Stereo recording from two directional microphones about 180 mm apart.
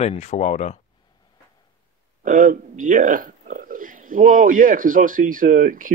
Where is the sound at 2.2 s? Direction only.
45° right (ahead or behind).